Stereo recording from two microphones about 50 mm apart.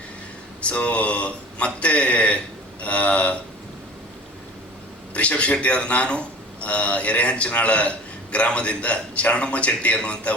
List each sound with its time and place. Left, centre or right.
0.6 s speech: left
5.1 s speech: left